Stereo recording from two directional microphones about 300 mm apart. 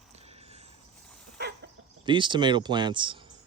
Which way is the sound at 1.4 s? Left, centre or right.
Right.